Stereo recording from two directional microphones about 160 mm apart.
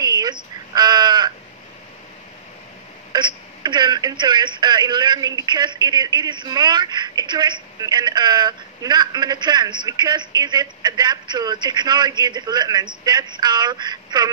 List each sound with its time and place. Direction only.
0.0 s crow: 25° right (ahead or behind)
3.1 s speech: 30° right (ahead or behind)